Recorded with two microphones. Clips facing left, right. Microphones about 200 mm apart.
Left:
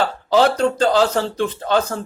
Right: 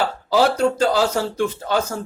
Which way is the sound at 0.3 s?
10° right (ahead or behind).